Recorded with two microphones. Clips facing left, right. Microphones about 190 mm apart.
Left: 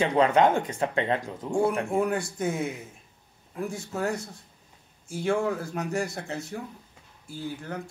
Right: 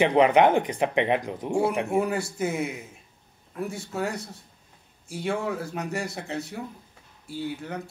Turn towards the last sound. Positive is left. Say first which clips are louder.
# right 2 dB
turn(degrees=0)  # may be behind; listen again after turning